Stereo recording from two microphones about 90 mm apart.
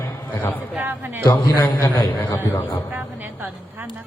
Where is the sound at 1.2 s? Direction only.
60° left (ahead or behind).